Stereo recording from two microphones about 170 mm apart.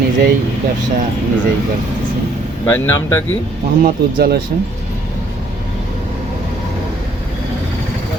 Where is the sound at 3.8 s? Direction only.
65° right (ahead or behind).